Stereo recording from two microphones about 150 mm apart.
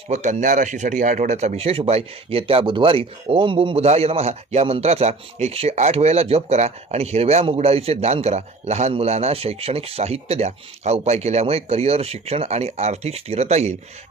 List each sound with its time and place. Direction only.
0.1 s speech: 50° right (ahead or behind)